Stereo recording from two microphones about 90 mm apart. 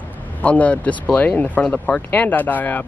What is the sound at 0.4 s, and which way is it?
Speech, 15° left (ahead or behind).